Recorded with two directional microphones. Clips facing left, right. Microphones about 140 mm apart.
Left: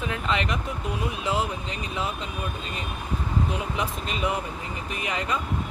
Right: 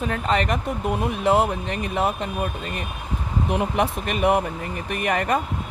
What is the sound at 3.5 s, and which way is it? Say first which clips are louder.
Speech: right 7 dB; 60° right (ahead or behind).